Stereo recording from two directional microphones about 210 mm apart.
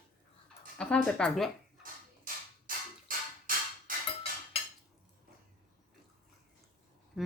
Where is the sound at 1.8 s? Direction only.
40° right (ahead or behind).